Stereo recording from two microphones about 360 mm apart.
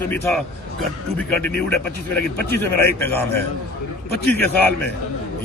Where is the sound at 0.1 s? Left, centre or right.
Centre.